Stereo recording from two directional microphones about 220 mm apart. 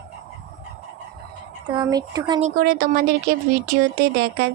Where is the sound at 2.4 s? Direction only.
40° right (ahead or behind).